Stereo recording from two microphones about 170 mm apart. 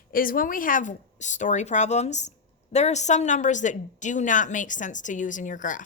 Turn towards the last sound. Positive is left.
turn(degrees=50)  # may be behind; listen again after turning